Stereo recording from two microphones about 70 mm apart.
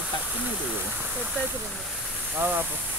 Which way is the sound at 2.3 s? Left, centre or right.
Right.